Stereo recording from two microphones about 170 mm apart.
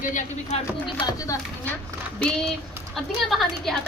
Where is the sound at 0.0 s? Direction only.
50° left (ahead or behind).